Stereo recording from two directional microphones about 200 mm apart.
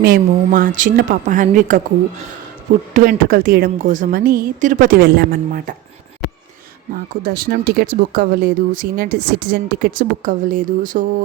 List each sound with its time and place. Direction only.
0.0 s speech: 45° right (ahead or behind)
7.2 s speech: 45° right (ahead or behind)